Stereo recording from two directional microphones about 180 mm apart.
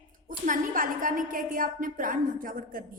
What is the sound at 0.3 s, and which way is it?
A woman's voice, 45° right (ahead or behind).